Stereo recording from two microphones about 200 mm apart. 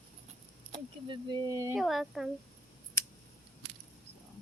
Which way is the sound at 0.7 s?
25° right (ahead or behind).